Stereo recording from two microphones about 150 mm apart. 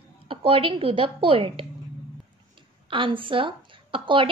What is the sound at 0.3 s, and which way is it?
A woman's voice, 35° right (ahead or behind).